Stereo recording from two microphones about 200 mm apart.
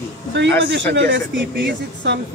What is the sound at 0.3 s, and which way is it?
Speech, 65° right (ahead or behind).